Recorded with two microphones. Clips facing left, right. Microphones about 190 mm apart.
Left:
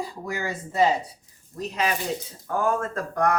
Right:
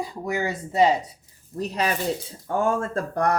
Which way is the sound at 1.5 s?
35° right (ahead or behind).